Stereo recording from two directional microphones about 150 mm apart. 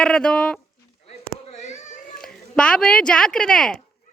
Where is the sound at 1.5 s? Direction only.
50° left (ahead or behind).